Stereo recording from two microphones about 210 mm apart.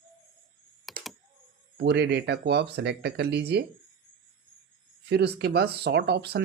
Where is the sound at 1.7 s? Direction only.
50° right (ahead or behind).